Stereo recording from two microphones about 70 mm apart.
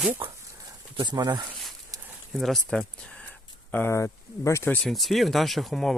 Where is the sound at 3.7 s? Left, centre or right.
Left.